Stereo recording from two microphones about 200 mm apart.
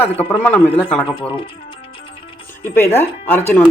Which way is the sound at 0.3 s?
10° left (ahead or behind).